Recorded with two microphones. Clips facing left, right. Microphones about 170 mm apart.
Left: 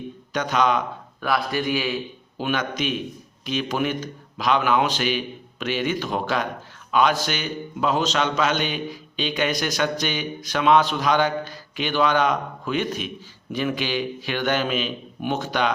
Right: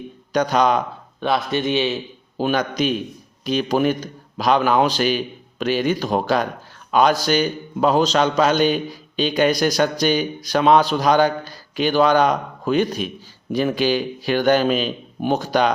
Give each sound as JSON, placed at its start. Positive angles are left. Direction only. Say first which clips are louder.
{"t": 0.3, "sound": "a man's voice", "louder": "right 4 dB", "side_deg": -40}
{"t": 1.2, "sound": "speech", "louder": "right 3 dB", "side_deg": -25}
{"t": 2.4, "sound": "a man's voice", "louder": "right 5 dB", "side_deg": -35}